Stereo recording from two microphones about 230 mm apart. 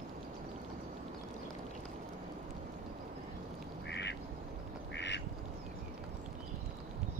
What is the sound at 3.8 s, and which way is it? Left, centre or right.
Quack, left.